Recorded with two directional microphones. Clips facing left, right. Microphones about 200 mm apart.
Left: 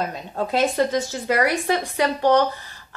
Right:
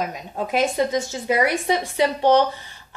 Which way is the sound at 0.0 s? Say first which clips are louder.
Left 1 dB; 15° right (ahead or behind).